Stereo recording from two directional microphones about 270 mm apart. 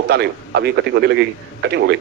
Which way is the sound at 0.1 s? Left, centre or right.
Right.